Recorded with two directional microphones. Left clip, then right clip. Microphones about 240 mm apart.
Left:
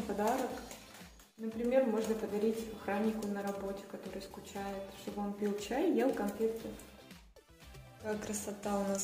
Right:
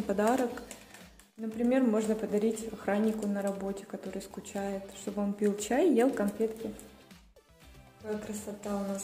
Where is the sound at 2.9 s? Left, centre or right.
Right.